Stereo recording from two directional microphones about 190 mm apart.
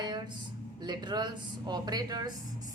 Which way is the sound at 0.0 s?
25° right (ahead or behind).